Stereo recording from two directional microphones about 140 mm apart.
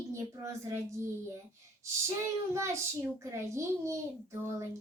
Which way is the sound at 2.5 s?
20° right (ahead or behind).